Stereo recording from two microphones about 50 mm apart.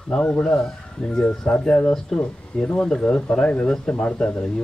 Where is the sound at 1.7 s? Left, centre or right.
Left.